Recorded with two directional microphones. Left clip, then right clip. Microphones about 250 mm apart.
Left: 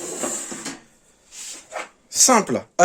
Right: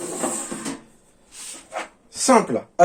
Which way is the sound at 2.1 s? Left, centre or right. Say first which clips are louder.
Even; left.